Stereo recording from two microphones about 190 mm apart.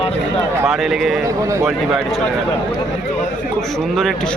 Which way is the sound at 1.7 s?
Centre (ahead or behind).